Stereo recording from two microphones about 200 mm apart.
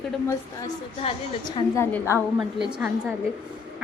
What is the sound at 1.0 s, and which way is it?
Speech, 25° left (ahead or behind).